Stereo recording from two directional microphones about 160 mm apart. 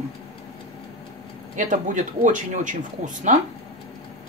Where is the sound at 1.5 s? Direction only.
55° right (ahead or behind).